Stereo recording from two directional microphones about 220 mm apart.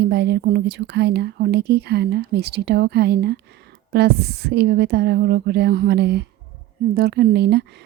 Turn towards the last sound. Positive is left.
turn(degrees=-50)  # may be behind; listen again after turning